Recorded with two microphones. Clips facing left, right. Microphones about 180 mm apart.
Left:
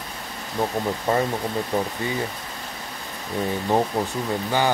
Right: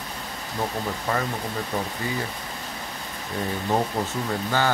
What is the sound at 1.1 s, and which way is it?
Speech, 25° left (ahead or behind).